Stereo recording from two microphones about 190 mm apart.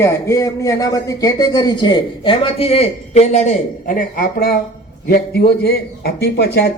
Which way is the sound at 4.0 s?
50° left (ahead or behind).